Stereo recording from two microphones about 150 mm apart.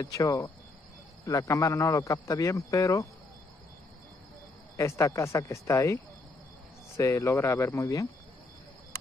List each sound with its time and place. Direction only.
0.0 s speech: 25° left (ahead or behind)
4.7 s speech: 20° left (ahead or behind)
7.0 s speech: 20° left (ahead or behind)